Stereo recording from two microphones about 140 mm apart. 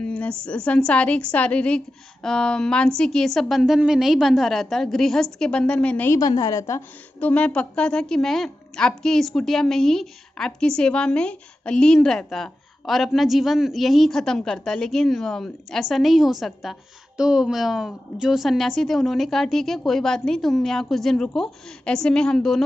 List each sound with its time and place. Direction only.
0.0 s a woman's voice: 10° left (ahead or behind)
6.1 s a woman's voice: 25° left (ahead or behind)
7.2 s a woman's voice: 10° left (ahead or behind)